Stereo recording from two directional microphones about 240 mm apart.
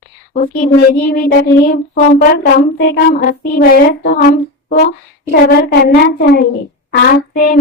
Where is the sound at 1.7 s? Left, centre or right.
Left.